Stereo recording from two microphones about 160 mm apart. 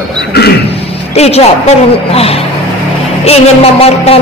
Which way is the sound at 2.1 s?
40° left (ahead or behind).